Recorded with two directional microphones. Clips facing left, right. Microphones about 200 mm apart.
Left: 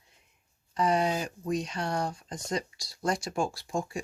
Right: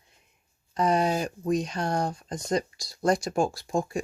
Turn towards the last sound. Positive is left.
turn(degrees=-45)  # may be behind; listen again after turning